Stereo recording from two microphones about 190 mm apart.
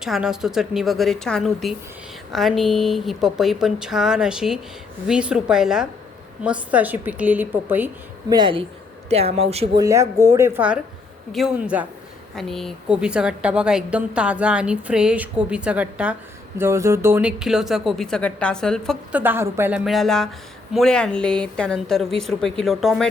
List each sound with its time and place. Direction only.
0.0 s a woman's voice: 5° right (ahead or behind)
8.3 s a woman's voice: 25° right (ahead or behind)
9.7 s a woman's voice: 15° right (ahead or behind); by 18.9 s 5° left (ahead or behind)
19.1 s a woman's voice: 10° right (ahead or behind)